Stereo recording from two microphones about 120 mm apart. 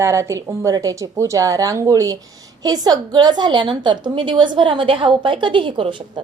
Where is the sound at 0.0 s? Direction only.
25° right (ahead or behind); by 6.2 s 45° right (ahead or behind).